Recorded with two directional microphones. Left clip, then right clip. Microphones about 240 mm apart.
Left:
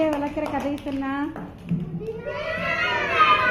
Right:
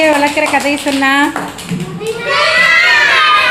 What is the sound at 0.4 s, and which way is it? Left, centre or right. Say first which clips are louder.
Speech: right 15 dB; centre.